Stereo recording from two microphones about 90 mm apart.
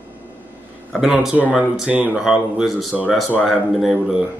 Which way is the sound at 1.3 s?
15° right (ahead or behind).